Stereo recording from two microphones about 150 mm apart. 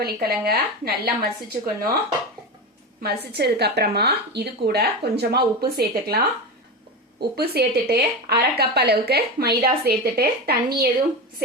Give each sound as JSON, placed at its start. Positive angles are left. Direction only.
{"t": 0.0, "sound": "speech", "side_deg": -90}
{"t": 3.0, "sound": "speech", "side_deg": -90}